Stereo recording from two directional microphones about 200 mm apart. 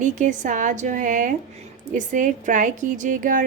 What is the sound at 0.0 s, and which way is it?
A woman's voice, 40° right (ahead or behind).